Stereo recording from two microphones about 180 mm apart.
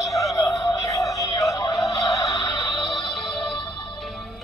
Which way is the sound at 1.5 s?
20° left (ahead or behind).